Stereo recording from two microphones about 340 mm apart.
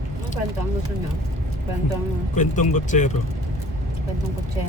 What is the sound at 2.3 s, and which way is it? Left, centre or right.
Speech, left.